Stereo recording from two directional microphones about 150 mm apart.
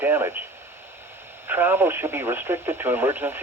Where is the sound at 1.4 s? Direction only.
15° right (ahead or behind).